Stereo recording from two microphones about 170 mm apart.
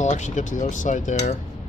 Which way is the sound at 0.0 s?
45° left (ahead or behind).